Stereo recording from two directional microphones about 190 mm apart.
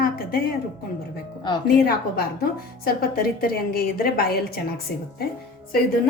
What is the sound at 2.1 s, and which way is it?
A woman's voice, 55° left (ahead or behind).